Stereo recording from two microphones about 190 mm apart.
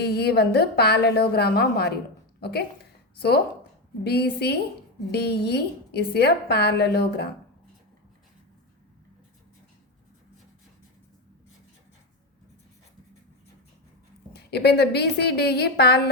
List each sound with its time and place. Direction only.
0.0 s a woman's voice: 60° left (ahead or behind)
14.3 s a woman's voice: 60° left (ahead or behind)